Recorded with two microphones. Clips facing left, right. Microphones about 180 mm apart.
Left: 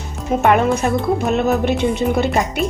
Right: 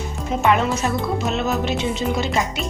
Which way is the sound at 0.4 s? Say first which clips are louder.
Left 4 dB; 55° left (ahead or behind).